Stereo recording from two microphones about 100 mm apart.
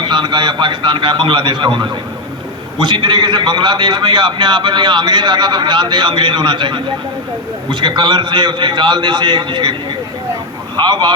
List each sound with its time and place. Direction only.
0.0 s a man's voice: 50° right (ahead or behind)
10.8 s a man's voice: 50° right (ahead or behind)